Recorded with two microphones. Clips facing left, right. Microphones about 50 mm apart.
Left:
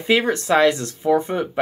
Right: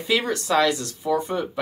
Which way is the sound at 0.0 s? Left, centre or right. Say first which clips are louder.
Left 5 dB; left.